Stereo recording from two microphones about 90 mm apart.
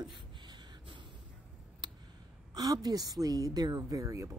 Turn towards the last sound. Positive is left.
turn(degrees=-35)  # may be behind; listen again after turning